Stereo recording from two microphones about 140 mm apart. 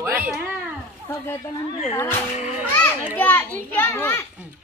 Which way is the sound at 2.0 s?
15° left (ahead or behind).